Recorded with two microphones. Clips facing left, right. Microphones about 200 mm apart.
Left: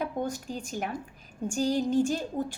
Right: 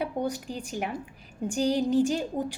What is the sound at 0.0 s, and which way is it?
A woman's voice, 15° right (ahead or behind).